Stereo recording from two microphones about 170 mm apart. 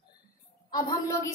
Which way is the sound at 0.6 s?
25° left (ahead or behind).